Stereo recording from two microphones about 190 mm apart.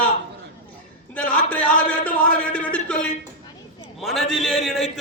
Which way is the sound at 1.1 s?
5° left (ahead or behind).